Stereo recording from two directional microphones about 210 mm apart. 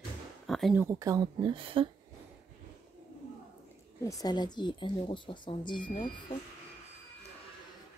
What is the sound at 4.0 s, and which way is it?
A woman's voice, 15° left (ahead or behind).